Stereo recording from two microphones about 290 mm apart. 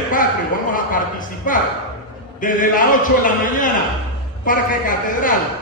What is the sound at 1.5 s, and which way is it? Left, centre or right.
A man's voice, left.